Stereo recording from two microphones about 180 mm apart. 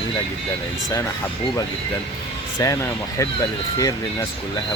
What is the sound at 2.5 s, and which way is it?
Speech, 15° left (ahead or behind).